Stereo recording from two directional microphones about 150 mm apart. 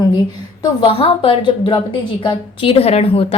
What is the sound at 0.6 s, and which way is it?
A woman's voice, 35° left (ahead or behind).